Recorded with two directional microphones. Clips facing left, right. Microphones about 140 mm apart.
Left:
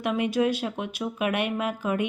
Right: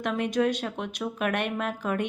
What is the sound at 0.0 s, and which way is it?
Speech, 5° left (ahead or behind).